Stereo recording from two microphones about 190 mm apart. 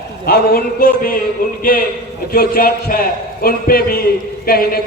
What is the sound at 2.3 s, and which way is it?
A man's voice, 50° left (ahead or behind).